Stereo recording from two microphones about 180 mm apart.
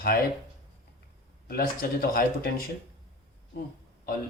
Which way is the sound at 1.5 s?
60° left (ahead or behind).